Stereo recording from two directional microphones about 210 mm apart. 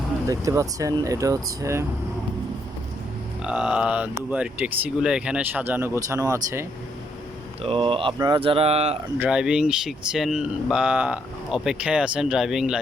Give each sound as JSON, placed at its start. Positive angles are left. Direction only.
{"t": 0.3, "sound": "speech", "side_deg": -15}
{"t": 3.4, "sound": "speech", "side_deg": -5}
{"t": 7.6, "sound": "speech", "side_deg": -25}
{"t": 9.1, "sound": "speech", "side_deg": -5}